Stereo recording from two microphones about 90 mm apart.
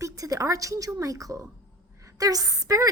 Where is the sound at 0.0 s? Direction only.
40° right (ahead or behind).